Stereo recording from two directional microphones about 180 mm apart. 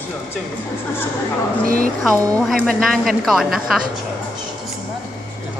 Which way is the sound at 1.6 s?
50° right (ahead or behind).